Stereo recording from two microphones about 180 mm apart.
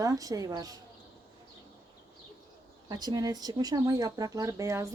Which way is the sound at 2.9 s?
20° right (ahead or behind).